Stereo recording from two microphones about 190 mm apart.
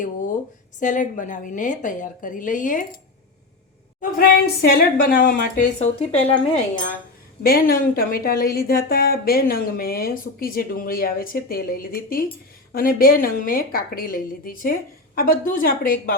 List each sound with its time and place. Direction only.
0.8 s a woman's voice: 45° left (ahead or behind)
4.0 s a woman's voice: 50° left (ahead or behind)
5.8 s speech: 35° left (ahead or behind)
7.4 s a woman's voice: 50° left (ahead or behind)